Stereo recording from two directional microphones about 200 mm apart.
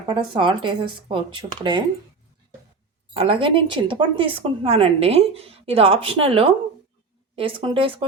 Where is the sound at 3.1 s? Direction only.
25° right (ahead or behind).